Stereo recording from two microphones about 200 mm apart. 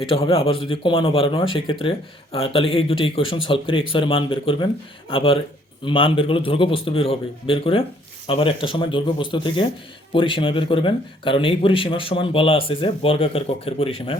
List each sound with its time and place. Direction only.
0.0 s speech: 30° left (ahead or behind)